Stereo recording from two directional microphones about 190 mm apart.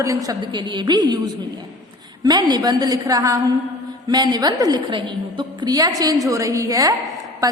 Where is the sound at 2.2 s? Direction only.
20° right (ahead or behind).